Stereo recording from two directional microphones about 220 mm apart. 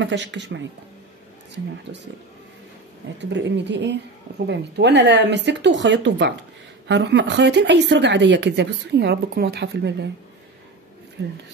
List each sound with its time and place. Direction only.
0.0 s speech: 55° right (ahead or behind)
3.2 s speech: 55° right (ahead or behind)
11.2 s speech: 50° right (ahead or behind)